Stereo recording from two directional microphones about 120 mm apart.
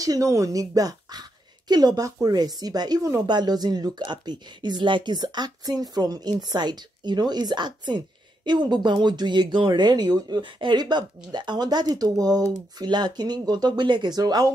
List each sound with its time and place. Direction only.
0.0 s speech: 30° right (ahead or behind)